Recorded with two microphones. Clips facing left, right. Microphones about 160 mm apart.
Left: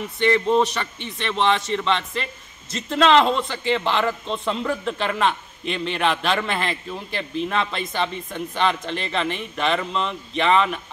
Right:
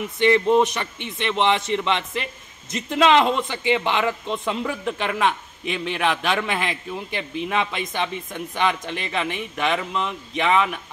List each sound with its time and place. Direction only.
0.2 s a man's voice: 15° right (ahead or behind)